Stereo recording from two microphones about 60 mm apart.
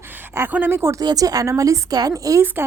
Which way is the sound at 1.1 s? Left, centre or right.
Right.